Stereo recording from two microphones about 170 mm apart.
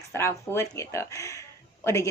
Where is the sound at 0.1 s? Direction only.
15° left (ahead or behind).